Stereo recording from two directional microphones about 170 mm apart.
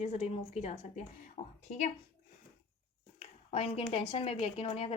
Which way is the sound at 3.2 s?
35° left (ahead or behind).